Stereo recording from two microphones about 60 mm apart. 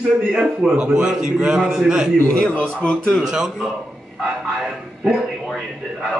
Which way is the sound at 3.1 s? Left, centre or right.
Centre.